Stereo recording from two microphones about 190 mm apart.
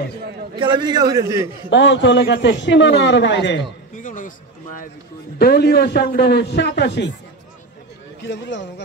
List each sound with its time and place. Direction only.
0.6 s a man's voice: 25° right (ahead or behind)
1.7 s a man's voice: 70° left (ahead or behind)
3.9 s speech: 45° left (ahead or behind)
5.4 s a man's voice: 55° left (ahead or behind)
8.3 s a man's voice: 70° left (ahead or behind)